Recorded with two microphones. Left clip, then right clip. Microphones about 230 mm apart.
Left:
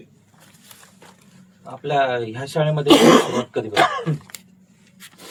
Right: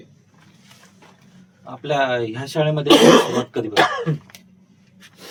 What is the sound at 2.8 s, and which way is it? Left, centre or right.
Speech, centre.